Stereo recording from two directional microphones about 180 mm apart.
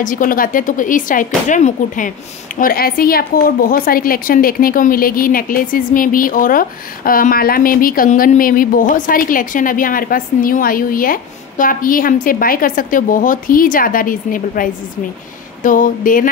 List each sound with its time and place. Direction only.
0.0 s a woman's voice: 50° left (ahead or behind)
2.6 s a woman's voice: 55° left (ahead or behind)